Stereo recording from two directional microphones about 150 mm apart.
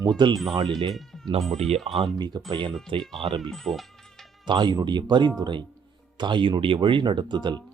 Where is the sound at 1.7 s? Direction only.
40° right (ahead or behind).